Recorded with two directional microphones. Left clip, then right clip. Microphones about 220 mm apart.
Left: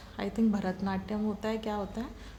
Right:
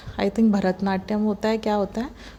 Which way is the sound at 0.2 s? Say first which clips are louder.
Right 10 dB; 25° right (ahead or behind).